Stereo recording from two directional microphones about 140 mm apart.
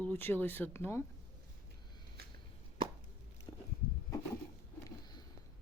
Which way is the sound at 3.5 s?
25° left (ahead or behind).